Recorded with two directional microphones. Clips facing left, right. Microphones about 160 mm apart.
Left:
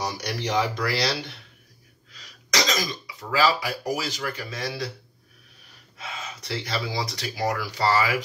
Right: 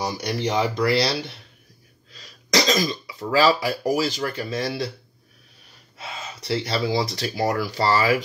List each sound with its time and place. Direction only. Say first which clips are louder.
0.0 s speech: right 4 dB; 25° right (ahead or behind)
2.1 s speech: right 5 dB; 30° right (ahead or behind)
5.9 s speech: right 1 dB; 35° right (ahead or behind)